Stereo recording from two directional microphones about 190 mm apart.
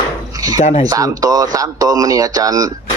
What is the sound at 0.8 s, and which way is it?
Speech, 20° right (ahead or behind).